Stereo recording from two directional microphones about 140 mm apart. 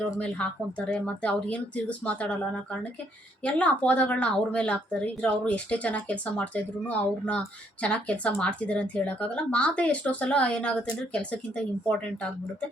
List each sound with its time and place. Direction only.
0.9 s speech: 10° left (ahead or behind)